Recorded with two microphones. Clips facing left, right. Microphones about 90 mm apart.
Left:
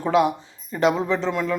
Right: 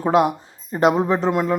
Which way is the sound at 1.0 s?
45° right (ahead or behind).